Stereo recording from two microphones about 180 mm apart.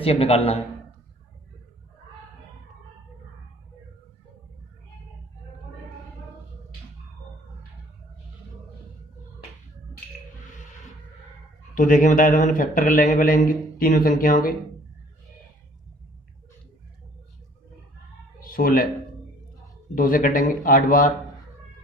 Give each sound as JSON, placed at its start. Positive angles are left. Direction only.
{"t": 0.0, "sound": "a man's voice", "side_deg": 35}
{"t": 11.7, "sound": "a man's voice", "side_deg": 45}
{"t": 18.4, "sound": "speech", "side_deg": 55}
{"t": 20.0, "sound": "a man's voice", "side_deg": 50}